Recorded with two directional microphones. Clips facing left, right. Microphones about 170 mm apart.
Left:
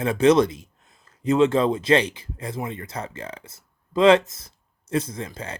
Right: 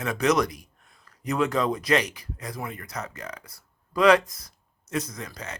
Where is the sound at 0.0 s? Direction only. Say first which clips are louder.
Left 6 dB; 30° left (ahead or behind).